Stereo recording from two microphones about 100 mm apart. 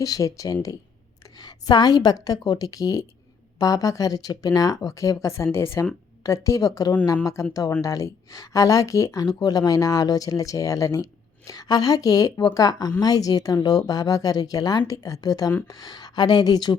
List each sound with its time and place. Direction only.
0.0 s speech: 35° left (ahead or behind)